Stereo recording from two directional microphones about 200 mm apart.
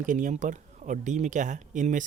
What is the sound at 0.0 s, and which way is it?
Speech, 40° right (ahead or behind).